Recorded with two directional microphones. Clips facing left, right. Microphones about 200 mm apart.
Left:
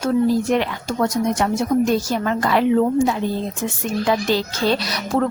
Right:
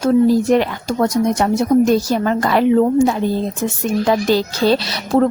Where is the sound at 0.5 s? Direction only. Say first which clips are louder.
Right 5 dB; 40° right (ahead or behind).